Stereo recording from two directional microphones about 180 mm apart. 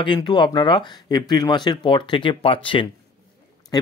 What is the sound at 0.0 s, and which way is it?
Speech, 25° left (ahead or behind).